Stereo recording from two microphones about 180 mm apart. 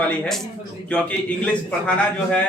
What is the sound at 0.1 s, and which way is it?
A man's voice, centre (ahead or behind).